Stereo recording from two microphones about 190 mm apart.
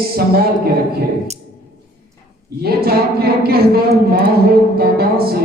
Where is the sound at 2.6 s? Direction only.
55° right (ahead or behind).